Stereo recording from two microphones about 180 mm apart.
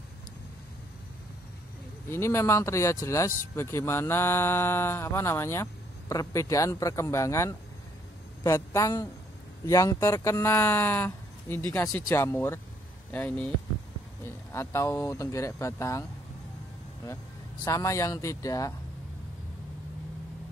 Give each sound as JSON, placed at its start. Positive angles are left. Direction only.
{"t": 2.0, "sound": "a man's voice", "side_deg": 15}
{"t": 17.6, "sound": "speech", "side_deg": 15}